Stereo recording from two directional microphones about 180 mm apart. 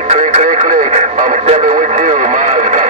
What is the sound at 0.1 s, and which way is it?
Radio, 40° right (ahead or behind).